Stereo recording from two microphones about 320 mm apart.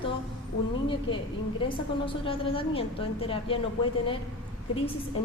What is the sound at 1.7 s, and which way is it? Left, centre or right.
A woman's voice, centre.